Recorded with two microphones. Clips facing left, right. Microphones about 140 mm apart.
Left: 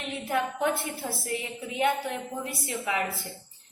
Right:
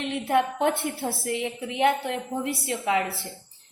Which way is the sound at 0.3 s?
65° right (ahead or behind).